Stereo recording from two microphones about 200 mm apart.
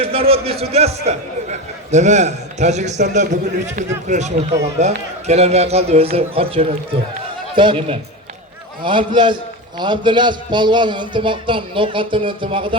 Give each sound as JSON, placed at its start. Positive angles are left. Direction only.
{"t": 0.0, "sound": "a man's voice", "side_deg": -30}